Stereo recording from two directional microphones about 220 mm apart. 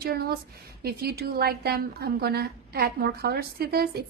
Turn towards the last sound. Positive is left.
turn(degrees=-45)  # may be behind; listen again after turning